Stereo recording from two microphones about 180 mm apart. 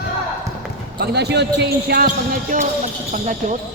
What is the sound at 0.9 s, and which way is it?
Speech, 65° right (ahead or behind).